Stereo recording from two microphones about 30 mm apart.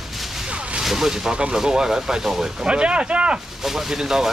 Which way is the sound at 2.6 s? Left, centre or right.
Right.